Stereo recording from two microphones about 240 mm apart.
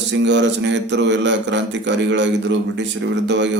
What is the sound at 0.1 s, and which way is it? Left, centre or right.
A man's voice, right.